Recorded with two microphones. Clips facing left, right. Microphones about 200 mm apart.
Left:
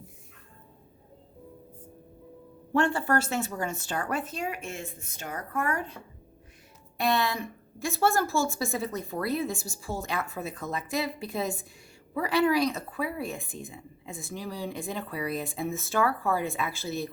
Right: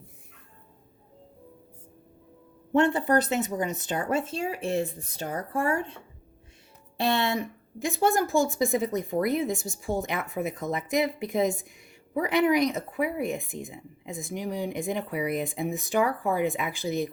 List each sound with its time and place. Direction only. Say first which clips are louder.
2.7 s speech: right 3 dB; 20° right (ahead or behind)